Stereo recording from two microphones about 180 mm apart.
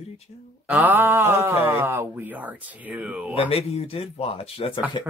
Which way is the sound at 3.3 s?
30° left (ahead or behind).